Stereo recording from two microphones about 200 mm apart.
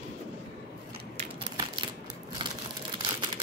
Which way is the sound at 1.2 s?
30° right (ahead or behind).